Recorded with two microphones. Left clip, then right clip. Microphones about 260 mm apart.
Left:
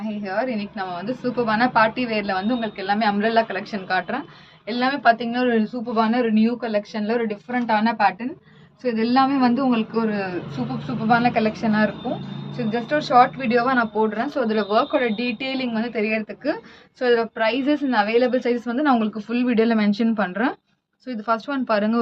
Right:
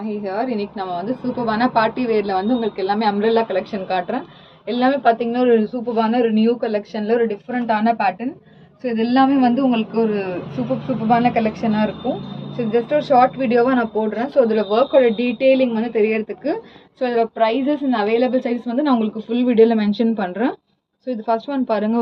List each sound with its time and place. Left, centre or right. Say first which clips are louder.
0.2 s a man's voice: right 1 dB; left